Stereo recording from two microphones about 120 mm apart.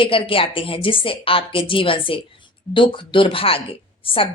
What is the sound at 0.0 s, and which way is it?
A woman's voice, 50° left (ahead or behind).